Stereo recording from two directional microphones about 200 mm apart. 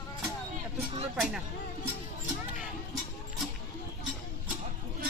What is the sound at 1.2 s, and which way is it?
Speech, centre (ahead or behind).